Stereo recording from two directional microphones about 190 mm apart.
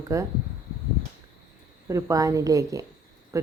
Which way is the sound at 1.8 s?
15° right (ahead or behind).